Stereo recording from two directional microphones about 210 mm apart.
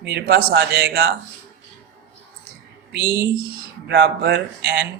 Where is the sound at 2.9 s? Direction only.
50° right (ahead or behind).